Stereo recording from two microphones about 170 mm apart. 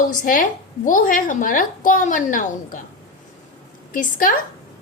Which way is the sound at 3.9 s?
55° left (ahead or behind).